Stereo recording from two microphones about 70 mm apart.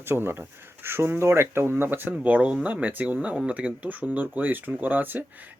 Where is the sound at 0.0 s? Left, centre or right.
Right.